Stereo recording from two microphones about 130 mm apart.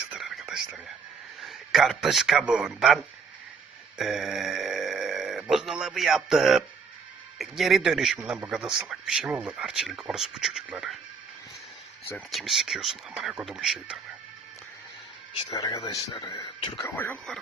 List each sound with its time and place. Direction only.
0.1 s whispering: 5° right (ahead or behind)
1.4 s a man's voice: centre (ahead or behind)
12.3 s speech: centre (ahead or behind)
15.4 s speech: 30° left (ahead or behind)
16.8 s speech: 15° left (ahead or behind)